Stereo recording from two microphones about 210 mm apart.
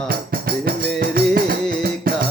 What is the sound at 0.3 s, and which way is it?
Music, 45° right (ahead or behind).